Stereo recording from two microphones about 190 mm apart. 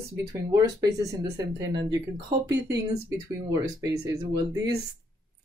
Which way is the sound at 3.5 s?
20° right (ahead or behind).